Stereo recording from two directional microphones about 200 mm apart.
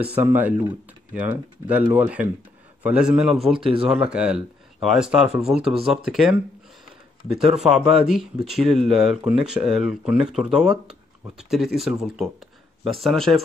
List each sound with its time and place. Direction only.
0.0 s speech: 10° right (ahead or behind)
3.6 s speech: 30° right (ahead or behind)
4.0 s speech: 5° right (ahead or behind)
7.6 s speech: 5° right (ahead or behind)